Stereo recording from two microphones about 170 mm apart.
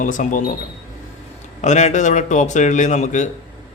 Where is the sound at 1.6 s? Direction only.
45° left (ahead or behind).